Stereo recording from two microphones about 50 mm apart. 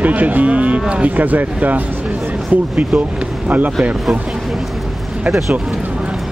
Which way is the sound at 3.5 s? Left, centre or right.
Right.